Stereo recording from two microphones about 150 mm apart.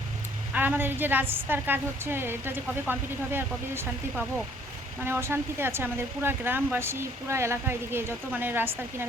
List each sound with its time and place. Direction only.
0.5 s speech: 15° right (ahead or behind)
5.0 s speech: 15° right (ahead or behind)